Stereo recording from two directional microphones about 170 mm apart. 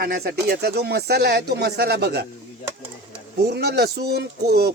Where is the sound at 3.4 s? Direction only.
75° right (ahead or behind).